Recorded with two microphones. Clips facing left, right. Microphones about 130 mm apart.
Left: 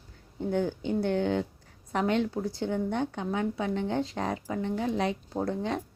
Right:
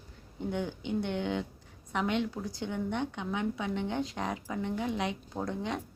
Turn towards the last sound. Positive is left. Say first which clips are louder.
# left 4 dB
turn(degrees=35)  # may be behind; listen again after turning